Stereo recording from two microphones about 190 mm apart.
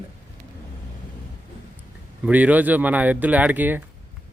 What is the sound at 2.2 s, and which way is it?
Speech, 10° right (ahead or behind).